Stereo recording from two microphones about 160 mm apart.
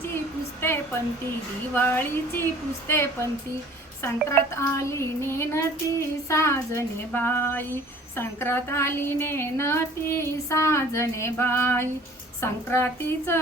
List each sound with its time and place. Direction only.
1.7 s speech: 15° left (ahead or behind)